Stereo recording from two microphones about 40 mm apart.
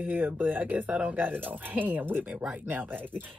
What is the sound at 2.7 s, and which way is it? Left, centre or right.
Speech, right.